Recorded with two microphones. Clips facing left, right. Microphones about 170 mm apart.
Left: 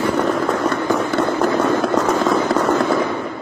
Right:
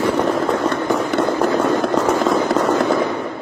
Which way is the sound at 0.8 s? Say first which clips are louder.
Even; 15° right (ahead or behind).